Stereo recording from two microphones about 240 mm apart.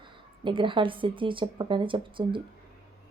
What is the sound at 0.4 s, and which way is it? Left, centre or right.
Speech, centre.